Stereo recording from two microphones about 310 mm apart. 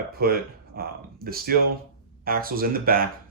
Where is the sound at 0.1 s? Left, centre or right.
Right.